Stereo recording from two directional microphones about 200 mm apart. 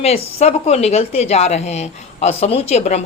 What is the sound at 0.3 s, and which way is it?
Speech, 30° left (ahead or behind).